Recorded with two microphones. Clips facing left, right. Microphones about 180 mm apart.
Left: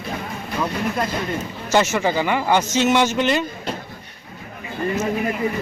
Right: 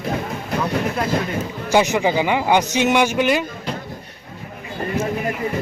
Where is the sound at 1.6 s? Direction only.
15° right (ahead or behind).